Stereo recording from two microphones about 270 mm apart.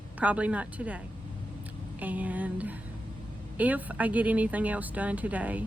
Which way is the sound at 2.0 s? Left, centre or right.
Centre.